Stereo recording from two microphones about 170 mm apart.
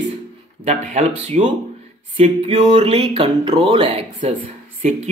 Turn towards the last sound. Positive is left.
turn(degrees=-45)  # may be behind; listen again after turning